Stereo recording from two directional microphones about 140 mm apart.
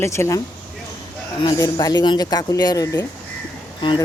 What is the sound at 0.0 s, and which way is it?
Speech, 20° left (ahead or behind).